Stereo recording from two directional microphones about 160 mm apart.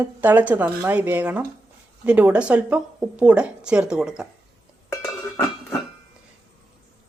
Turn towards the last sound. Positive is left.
turn(degrees=20)  # may be behind; listen again after turning